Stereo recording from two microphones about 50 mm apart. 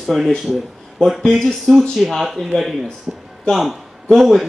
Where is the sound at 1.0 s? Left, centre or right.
Centre.